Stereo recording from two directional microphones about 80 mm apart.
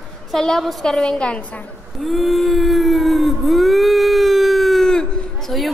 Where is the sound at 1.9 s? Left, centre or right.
Centre.